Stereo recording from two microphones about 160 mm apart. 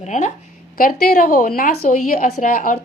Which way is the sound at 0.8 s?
65° left (ahead or behind).